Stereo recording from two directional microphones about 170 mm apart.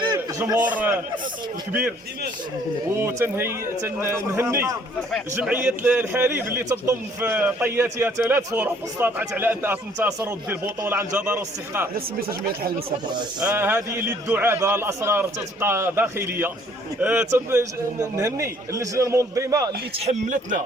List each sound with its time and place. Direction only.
0.0 s a sound: 25° right (ahead or behind)
0.7 s a man's voice: 10° right (ahead or behind)
2.9 s a man's voice: 15° right (ahead or behind)
11.9 s speech: 60° right (ahead or behind)
13.4 s a man's voice: 10° right (ahead or behind)
20.1 s speech: 45° right (ahead or behind)